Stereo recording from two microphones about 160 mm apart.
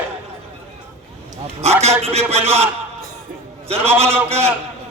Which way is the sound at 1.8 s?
40° right (ahead or behind).